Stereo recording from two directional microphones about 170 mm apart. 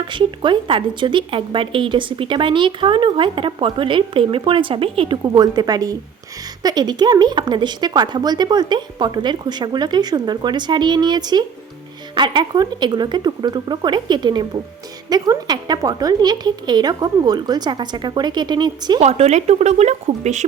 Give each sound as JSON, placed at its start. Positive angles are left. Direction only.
{"t": 0.1, "sound": "speech", "side_deg": -30}
{"t": 18.9, "sound": "a woman's voice", "side_deg": -40}